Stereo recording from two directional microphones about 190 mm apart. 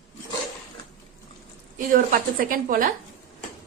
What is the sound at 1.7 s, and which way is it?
Speech, 45° right (ahead or behind).